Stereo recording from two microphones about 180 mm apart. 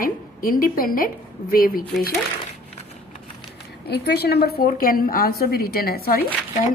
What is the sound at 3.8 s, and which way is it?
A woman's voice, 65° left (ahead or behind).